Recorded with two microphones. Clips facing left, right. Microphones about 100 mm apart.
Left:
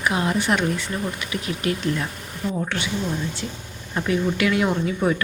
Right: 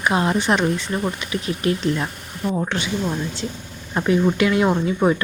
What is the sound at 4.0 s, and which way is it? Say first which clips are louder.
Speech: right 4 dB; 30° right (ahead or behind).